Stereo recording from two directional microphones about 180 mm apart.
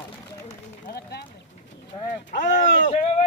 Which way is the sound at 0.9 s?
65° left (ahead or behind).